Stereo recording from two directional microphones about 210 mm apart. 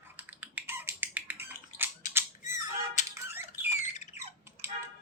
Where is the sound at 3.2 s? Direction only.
10° right (ahead or behind).